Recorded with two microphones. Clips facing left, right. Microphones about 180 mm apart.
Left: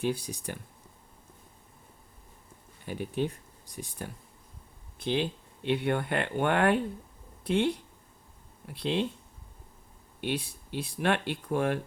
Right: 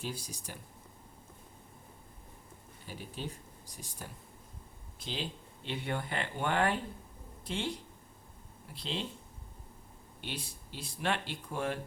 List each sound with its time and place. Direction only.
0.0 s speech: 60° left (ahead or behind)
2.8 s speech: 60° left (ahead or behind)
10.2 s speech: 60° left (ahead or behind)